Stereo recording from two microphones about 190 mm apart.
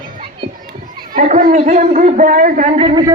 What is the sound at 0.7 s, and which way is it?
Speech, 45° right (ahead or behind).